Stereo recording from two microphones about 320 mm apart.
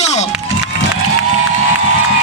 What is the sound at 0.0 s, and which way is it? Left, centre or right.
Run, left.